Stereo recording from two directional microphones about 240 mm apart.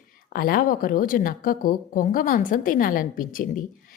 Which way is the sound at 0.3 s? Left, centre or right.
Left.